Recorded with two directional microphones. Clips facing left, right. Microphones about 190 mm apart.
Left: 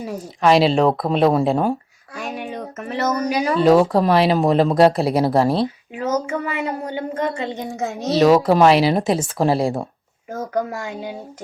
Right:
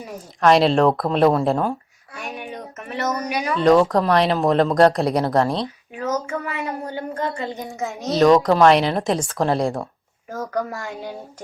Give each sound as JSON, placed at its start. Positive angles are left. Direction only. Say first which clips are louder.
{"t": 0.4, "sound": "speech", "louder": "even", "side_deg": 0}
{"t": 2.1, "sound": "a sound", "louder": "left 4 dB", "side_deg": 35}
{"t": 3.6, "sound": "speech", "louder": "left 1 dB", "side_deg": 5}
{"t": 6.2, "sound": "a woman's voice", "louder": "left 3 dB", "side_deg": 25}
{"t": 8.1, "sound": "speech", "louder": "left 1 dB", "side_deg": 5}
{"t": 10.3, "sound": "speech", "louder": "left 2 dB", "side_deg": 20}